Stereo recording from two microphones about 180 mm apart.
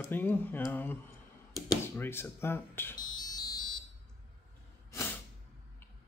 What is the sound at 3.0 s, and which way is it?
Fire alarm, 20° left (ahead or behind).